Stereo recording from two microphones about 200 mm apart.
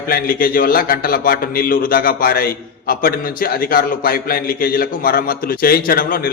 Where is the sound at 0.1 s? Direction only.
45° left (ahead or behind).